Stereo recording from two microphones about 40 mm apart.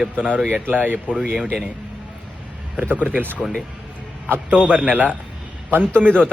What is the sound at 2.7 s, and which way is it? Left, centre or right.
Speech, right.